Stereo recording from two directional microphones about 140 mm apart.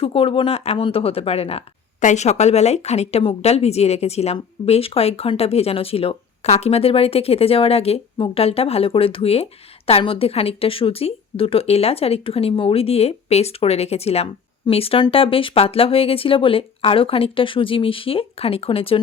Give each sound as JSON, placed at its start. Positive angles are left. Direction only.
{"t": 0.0, "sound": "speech", "side_deg": 40}
{"t": 2.0, "sound": "speech", "side_deg": 60}